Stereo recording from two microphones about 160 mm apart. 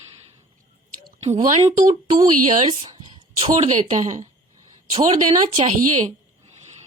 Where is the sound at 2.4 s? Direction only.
50° right (ahead or behind).